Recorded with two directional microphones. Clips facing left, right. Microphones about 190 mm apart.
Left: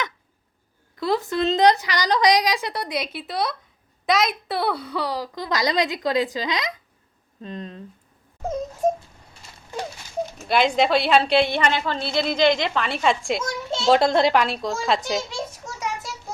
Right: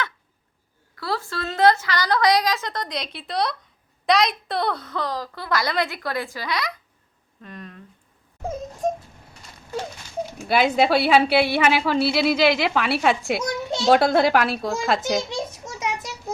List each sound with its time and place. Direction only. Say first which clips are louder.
0.9 s a woman's voice: left 6 dB; 20° left (ahead or behind)
10.4 s a woman's voice: right 1 dB; 5° right (ahead or behind)
13.4 s children playing: right 1 dB; 20° right (ahead or behind)
13.9 s a woman's voice: right 1 dB; 5° right (ahead or behind)
15.3 s a sound: right 2 dB; 20° right (ahead or behind)